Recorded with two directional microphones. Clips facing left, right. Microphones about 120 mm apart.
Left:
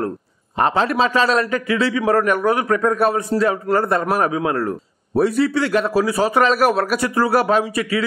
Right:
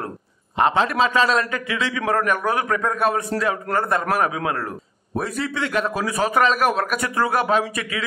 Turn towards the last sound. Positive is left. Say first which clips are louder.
# left 4 dB
turn(degrees=35)  # may be behind; listen again after turning